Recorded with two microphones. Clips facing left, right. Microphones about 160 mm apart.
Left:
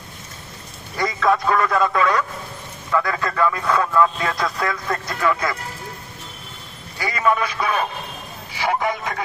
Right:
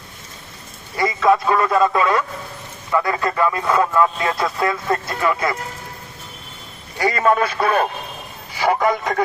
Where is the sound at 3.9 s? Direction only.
5° right (ahead or behind).